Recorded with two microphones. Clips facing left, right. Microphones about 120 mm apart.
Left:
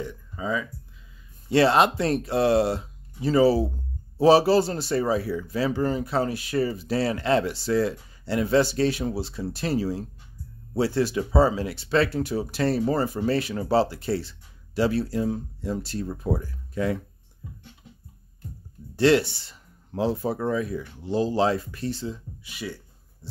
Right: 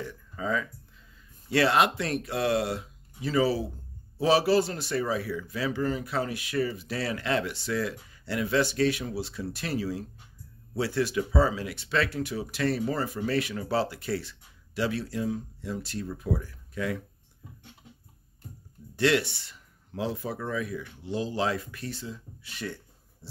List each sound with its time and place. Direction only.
0.0 s speech: 15° left (ahead or behind)
1.5 s a man's voice: 30° left (ahead or behind)
18.9 s a man's voice: 30° left (ahead or behind)
22.4 s speech: 10° left (ahead or behind)